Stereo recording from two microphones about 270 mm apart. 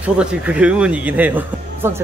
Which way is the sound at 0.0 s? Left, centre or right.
Centre.